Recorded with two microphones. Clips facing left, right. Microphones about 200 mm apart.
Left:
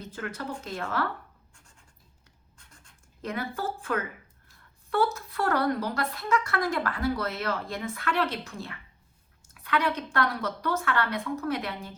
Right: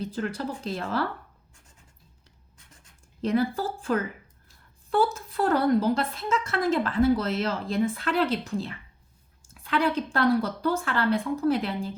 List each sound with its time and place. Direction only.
0.0 s speech: 30° right (ahead or behind)
3.2 s a woman's voice: 30° right (ahead or behind)